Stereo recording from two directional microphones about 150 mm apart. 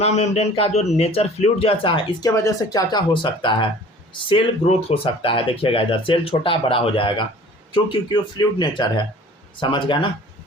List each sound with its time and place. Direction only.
0.0 s a man's voice: 45° left (ahead or behind)
2.3 s speech: 20° left (ahead or behind)